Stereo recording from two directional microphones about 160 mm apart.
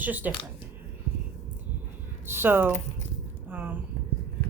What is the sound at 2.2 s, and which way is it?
Speech, 15° right (ahead or behind).